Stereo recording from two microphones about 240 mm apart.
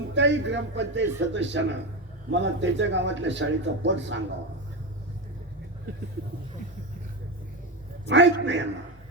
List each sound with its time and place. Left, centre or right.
0.1 s speech: right
8.1 s speech: right